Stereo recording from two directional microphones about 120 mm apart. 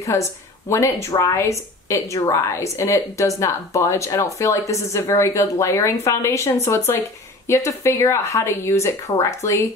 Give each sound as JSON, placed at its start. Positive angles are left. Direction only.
{"t": 0.0, "sound": "a woman's voice", "side_deg": 25}